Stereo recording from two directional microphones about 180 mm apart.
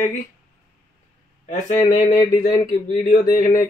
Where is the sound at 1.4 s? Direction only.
40° left (ahead or behind).